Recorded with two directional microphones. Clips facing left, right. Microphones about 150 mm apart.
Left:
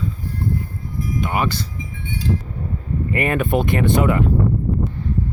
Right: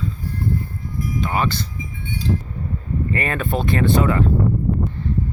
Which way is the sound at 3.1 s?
15° left (ahead or behind).